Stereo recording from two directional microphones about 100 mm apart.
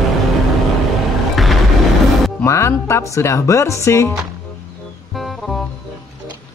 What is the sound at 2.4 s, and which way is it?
Speech, 30° left (ahead or behind).